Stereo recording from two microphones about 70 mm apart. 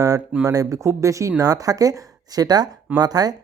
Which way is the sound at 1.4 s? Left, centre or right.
Right.